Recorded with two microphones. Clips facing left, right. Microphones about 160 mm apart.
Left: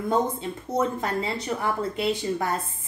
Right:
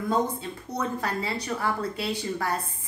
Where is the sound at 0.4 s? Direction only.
25° left (ahead or behind).